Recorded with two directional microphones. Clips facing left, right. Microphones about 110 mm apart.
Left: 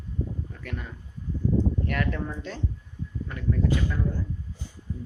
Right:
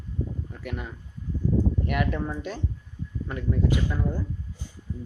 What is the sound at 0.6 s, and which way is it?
Speech, 15° right (ahead or behind).